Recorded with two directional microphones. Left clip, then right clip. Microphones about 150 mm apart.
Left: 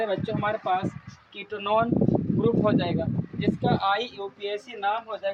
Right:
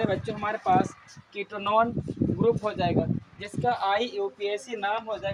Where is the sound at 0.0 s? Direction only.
10° left (ahead or behind).